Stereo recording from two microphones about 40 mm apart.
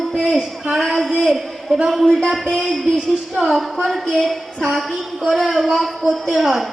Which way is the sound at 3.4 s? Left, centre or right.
Centre.